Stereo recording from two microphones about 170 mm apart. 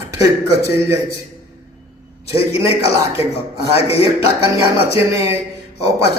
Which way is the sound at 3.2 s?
35° left (ahead or behind).